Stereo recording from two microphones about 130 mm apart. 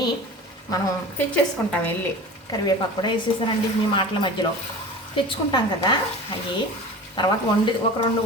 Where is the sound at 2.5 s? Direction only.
30° left (ahead or behind).